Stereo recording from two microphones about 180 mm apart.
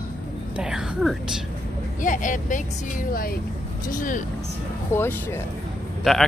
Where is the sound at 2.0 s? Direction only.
45° left (ahead or behind).